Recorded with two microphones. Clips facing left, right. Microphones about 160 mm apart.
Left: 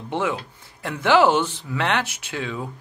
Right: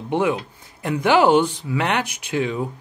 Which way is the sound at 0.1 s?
15° right (ahead or behind).